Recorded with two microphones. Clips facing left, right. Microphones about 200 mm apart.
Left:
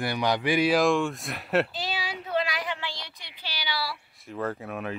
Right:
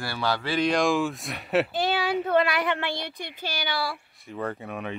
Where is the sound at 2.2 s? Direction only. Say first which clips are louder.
Right 4 dB; 60° right (ahead or behind).